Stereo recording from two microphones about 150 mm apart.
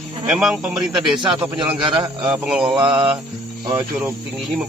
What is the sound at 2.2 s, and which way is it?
Speech, 5° right (ahead or behind).